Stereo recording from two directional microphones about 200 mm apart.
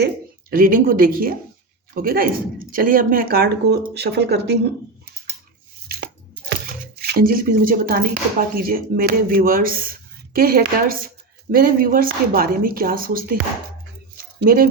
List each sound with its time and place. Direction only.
0.5 s speech: 45° right (ahead or behind)
7.1 s speech: 45° right (ahead or behind)
14.3 s speech: 45° right (ahead or behind)